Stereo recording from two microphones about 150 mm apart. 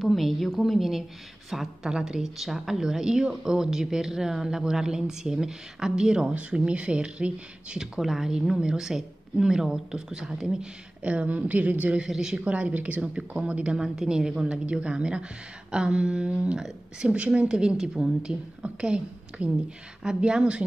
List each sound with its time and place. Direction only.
0.0 s a woman's voice: centre (ahead or behind)